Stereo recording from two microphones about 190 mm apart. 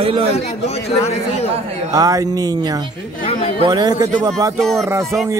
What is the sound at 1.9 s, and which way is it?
Speech, 20° right (ahead or behind).